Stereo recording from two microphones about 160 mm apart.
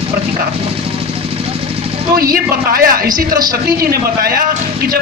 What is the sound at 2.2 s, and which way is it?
Speech, 70° right (ahead or behind).